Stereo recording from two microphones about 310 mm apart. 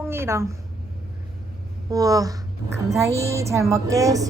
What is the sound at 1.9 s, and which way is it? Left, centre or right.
A woman's voice, centre.